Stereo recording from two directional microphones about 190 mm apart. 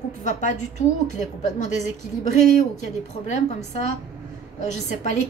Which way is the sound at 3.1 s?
35° left (ahead or behind).